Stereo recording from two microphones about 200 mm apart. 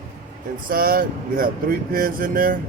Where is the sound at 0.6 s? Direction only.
45° right (ahead or behind).